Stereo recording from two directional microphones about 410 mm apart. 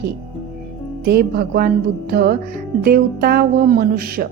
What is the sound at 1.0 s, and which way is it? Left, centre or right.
A woman's voice, right.